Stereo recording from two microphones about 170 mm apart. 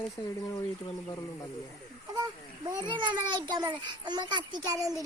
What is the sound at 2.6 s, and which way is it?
A child's voice, 25° right (ahead or behind).